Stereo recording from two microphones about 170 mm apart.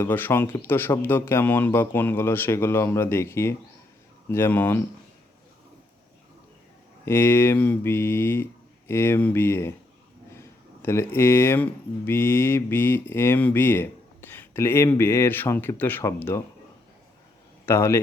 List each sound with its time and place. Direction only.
0.0 s speech: 10° left (ahead or behind)
7.0 s speech: 15° left (ahead or behind)
10.8 s speech: 15° left (ahead or behind)
17.7 s speech: 15° left (ahead or behind)